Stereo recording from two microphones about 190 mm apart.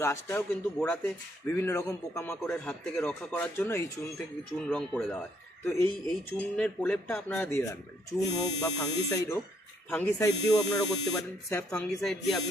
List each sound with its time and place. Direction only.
0.0 s speech: 10° left (ahead or behind)
11.4 s speech: 10° left (ahead or behind)